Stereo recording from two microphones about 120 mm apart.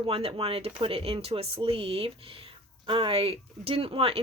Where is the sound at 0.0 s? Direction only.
50° right (ahead or behind).